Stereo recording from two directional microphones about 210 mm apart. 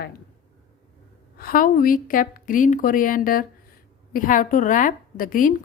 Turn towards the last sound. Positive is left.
turn(degrees=40)  # may be behind; listen again after turning